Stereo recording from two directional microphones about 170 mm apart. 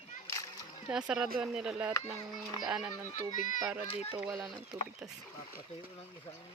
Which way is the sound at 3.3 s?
50° left (ahead or behind).